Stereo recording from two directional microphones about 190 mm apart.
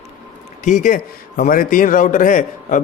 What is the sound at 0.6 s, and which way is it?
Speech, 40° left (ahead or behind).